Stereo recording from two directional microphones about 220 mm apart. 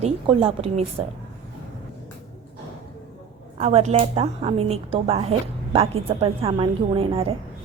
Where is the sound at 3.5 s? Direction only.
30° right (ahead or behind).